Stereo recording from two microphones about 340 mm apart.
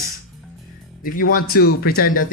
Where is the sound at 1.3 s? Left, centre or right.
Left.